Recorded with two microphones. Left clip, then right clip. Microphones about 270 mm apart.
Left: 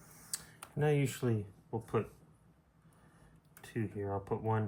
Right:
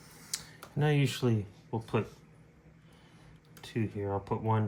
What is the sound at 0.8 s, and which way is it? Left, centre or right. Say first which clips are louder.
Speech: right 2 dB; right.